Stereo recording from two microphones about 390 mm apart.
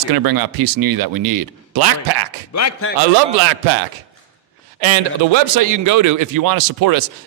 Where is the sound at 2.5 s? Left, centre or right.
Left.